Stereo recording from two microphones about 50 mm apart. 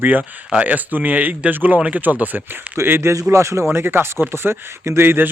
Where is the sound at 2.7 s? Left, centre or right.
Right.